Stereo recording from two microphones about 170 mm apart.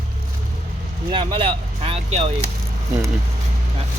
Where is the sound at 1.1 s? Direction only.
30° right (ahead or behind).